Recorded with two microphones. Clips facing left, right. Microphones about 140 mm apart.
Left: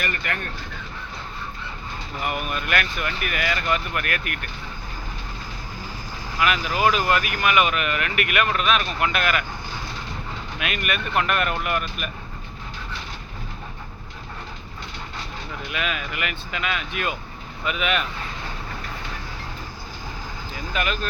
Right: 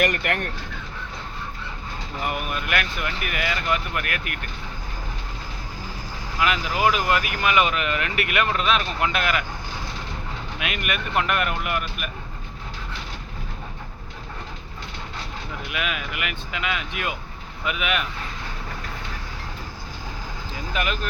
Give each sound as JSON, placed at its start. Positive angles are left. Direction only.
{"t": 0.0, "sound": "speech", "side_deg": -65}
{"t": 2.2, "sound": "speech", "side_deg": -20}
{"t": 6.4, "sound": "speech", "side_deg": -20}
{"t": 10.6, "sound": "speech", "side_deg": -20}
{"t": 15.7, "sound": "speech", "side_deg": -10}
{"t": 20.7, "sound": "speech", "side_deg": -20}